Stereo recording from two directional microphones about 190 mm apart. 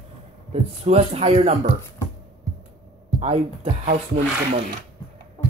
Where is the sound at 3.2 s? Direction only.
35° right (ahead or behind).